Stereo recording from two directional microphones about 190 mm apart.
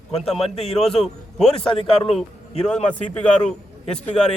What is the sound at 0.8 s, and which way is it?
Speech, centre (ahead or behind).